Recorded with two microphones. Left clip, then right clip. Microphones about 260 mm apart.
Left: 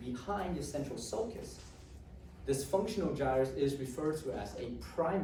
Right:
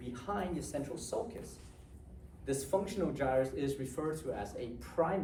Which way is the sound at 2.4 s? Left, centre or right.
Right.